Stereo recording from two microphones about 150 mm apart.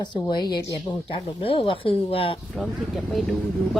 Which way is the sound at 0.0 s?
30° left (ahead or behind).